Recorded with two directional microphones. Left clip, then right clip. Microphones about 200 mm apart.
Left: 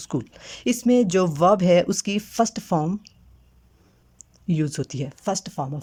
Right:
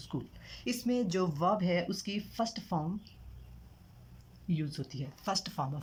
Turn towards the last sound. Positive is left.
turn(degrees=30)  # may be behind; listen again after turning